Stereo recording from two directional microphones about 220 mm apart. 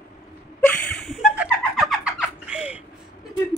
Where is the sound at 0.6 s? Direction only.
Centre (ahead or behind).